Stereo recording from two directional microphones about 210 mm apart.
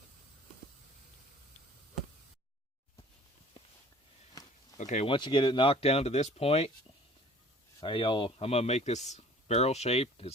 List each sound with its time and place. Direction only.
4.8 s a man's voice: 35° left (ahead or behind)
7.8 s a man's voice: 25° left (ahead or behind)